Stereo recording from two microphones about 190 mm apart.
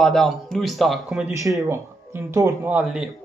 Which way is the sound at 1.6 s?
15° right (ahead or behind).